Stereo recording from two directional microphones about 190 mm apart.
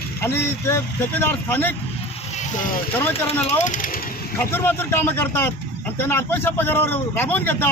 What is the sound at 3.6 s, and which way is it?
Speech, 45° left (ahead or behind).